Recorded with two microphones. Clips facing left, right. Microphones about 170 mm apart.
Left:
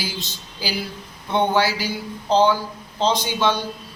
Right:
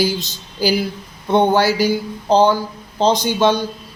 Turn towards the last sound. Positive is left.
turn(degrees=-45)  # may be behind; listen again after turning